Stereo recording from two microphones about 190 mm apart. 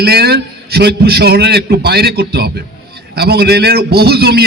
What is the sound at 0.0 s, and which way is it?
A man's voice, 55° right (ahead or behind).